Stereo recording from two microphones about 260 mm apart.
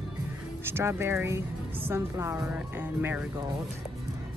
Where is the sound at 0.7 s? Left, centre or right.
Centre.